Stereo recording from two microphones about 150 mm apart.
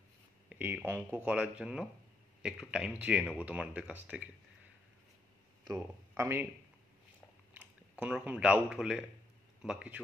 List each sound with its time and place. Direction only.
0.5 s speech: 10° right (ahead or behind)
6.1 s speech: 15° right (ahead or behind)
8.0 s a man's voice: 10° right (ahead or behind)